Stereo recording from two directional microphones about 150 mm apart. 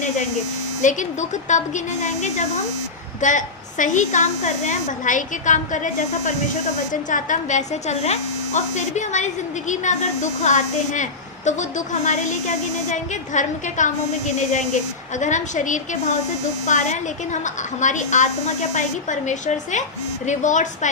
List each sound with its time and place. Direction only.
0.8 s a woman's voice: 55° left (ahead or behind)